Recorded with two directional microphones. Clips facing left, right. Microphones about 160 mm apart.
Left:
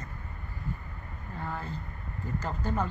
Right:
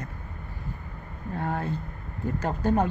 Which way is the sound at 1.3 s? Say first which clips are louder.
Right 7 dB; 65° right (ahead or behind).